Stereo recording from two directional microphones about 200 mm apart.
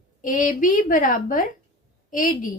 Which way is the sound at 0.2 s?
40° left (ahead or behind).